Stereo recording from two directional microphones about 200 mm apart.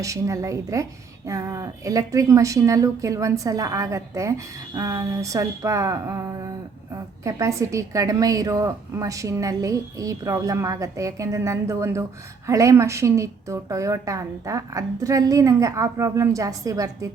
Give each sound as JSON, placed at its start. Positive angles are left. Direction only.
{"t": 0.0, "sound": "speech", "side_deg": -15}